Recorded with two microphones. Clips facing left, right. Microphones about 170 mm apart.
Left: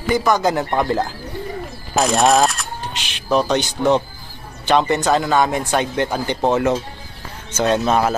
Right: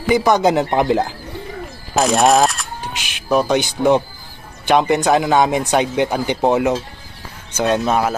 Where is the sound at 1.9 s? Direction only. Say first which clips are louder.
Right 1 dB; centre (ahead or behind).